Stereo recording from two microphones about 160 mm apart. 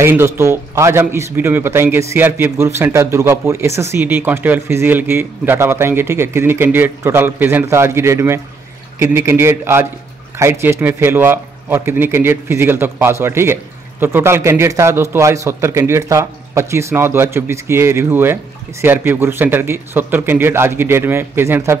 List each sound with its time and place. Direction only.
0.0 s speech: 15° right (ahead or behind)